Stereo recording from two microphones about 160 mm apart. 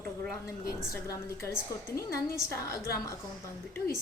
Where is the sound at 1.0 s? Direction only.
15° left (ahead or behind).